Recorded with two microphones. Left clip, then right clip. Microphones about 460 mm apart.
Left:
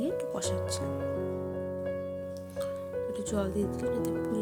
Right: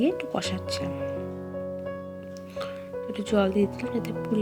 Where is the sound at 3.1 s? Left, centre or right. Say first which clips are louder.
Right 12 dB; left.